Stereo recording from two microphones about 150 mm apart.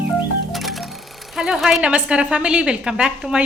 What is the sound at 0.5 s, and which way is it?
Music, centre (ahead or behind).